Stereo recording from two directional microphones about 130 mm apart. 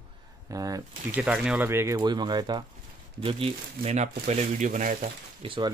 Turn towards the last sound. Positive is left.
turn(degrees=-40)  # may be behind; listen again after turning